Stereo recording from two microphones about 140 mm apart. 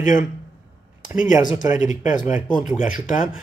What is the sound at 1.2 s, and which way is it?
Speech, 65° left (ahead or behind).